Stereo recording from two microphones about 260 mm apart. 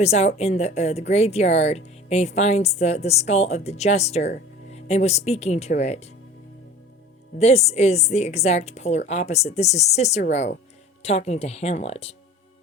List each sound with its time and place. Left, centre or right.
0.0 s a woman's voice: left
7.3 s a woman's voice: left